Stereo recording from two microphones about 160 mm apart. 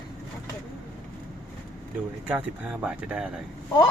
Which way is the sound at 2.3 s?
10° right (ahead or behind).